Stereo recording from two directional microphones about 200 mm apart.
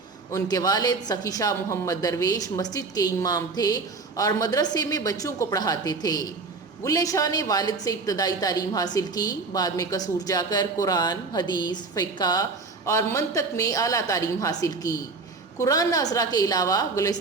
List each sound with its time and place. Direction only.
0.3 s a woman's voice: 15° left (ahead or behind)